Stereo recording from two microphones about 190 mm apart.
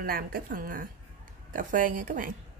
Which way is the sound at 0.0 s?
50° right (ahead or behind).